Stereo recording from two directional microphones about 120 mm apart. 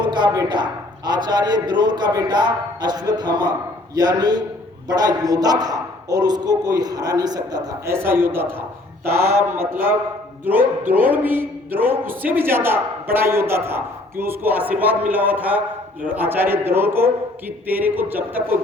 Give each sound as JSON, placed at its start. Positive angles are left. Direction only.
{"t": 0.0, "sound": "a man's voice", "side_deg": -40}
{"t": 8.0, "sound": "a man's voice", "side_deg": -20}